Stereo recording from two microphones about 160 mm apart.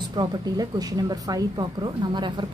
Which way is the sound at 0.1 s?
25° right (ahead or behind).